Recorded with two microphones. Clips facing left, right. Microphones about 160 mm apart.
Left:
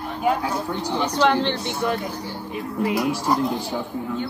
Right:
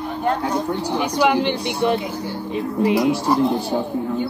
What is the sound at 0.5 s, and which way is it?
A woman's voice, 15° right (ahead or behind).